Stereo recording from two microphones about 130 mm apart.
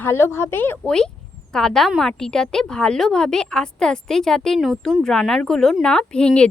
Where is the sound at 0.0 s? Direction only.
20° left (ahead or behind).